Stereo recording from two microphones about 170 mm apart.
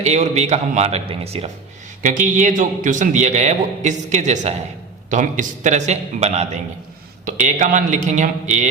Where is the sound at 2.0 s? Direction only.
50° right (ahead or behind).